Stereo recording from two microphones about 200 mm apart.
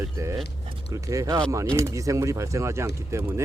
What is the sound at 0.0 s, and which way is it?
Speech, 15° right (ahead or behind).